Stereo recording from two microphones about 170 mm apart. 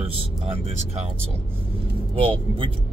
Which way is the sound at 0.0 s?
35° right (ahead or behind).